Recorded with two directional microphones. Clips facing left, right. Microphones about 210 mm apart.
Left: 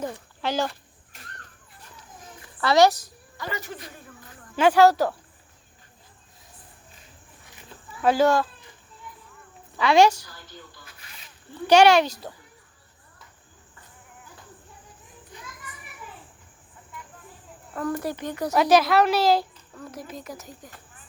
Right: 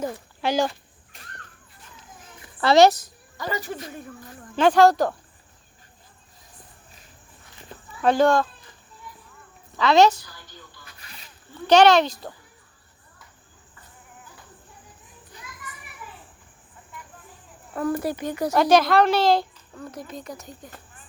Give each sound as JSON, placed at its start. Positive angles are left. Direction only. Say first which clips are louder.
{"t": 0.0, "sound": "speech", "louder": "right 3 dB", "side_deg": -15}
{"t": 2.6, "sound": "a woman's voice", "louder": "right 3 dB", "side_deg": -25}
{"t": 3.3, "sound": "speech", "louder": "right 4 dB", "side_deg": -40}
{"t": 4.5, "sound": "speech", "louder": "right 1 dB", "side_deg": 10}
{"t": 8.0, "sound": "speech", "louder": "right 1 dB", "side_deg": 5}
{"t": 9.7, "sound": "speech", "louder": "right 1 dB", "side_deg": 10}
{"t": 11.7, "sound": "speech", "louder": "right 1 dB", "side_deg": 10}
{"t": 17.7, "sound": "speech", "louder": "right 3 dB", "side_deg": -10}
{"t": 18.5, "sound": "a woman's voice", "louder": "right 1 dB", "side_deg": 5}